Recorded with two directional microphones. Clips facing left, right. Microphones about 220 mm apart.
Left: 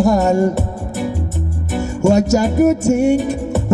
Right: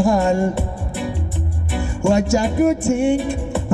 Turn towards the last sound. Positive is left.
turn(degrees=40)  # may be behind; listen again after turning